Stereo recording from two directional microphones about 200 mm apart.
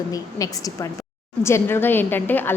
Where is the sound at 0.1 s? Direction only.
15° left (ahead or behind).